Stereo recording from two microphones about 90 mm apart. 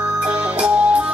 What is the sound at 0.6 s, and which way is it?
Music, 15° right (ahead or behind).